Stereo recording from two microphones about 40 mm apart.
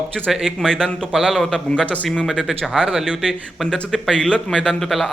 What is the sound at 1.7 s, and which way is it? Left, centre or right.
Speech, left.